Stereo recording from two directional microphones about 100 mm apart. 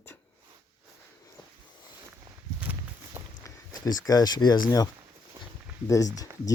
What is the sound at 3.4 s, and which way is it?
Speech, 35° left (ahead or behind).